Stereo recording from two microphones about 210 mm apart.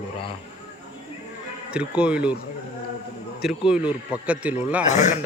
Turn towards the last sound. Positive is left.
turn(degrees=35)  # may be behind; listen again after turning